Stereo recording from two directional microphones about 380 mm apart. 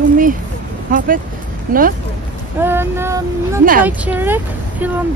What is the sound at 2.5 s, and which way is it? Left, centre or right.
Speech, centre.